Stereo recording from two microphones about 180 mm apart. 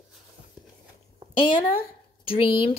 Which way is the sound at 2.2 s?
30° left (ahead or behind).